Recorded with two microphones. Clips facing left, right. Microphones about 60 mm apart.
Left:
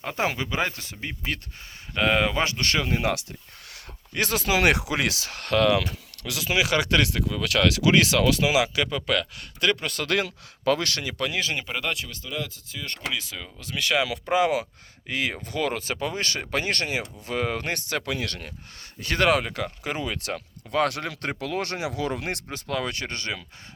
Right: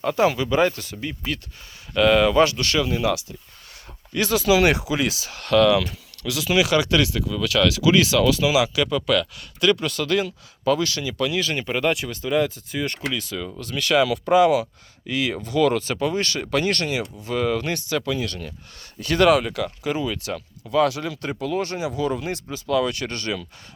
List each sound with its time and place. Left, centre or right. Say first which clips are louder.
0.0 s speech: right 7 dB; left
4.1 s speech: right 5 dB; left
4.9 s speech: right 2 dB; left
5.4 s speech: right 4 dB; left
6.7 s speech: right 3 dB; left
10.1 s speech: right 1 dB; left
11.3 s speech: right 3 dB; left
11.6 s speech: right 7 dB; centre
12.2 s speech: right 13 dB; right
13.1 s speech: right 5 dB; centre; by 18.5 s left
18.9 s speech: right 5 dB; left
21.4 s speech: right 5 dB; left
22.7 s speech: right 7 dB; left